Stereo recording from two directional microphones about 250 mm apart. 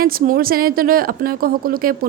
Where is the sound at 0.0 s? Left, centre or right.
Right.